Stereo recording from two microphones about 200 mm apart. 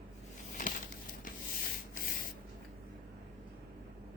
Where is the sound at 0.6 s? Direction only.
40° left (ahead or behind).